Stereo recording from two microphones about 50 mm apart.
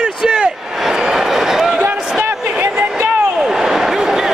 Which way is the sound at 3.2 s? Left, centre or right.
Centre.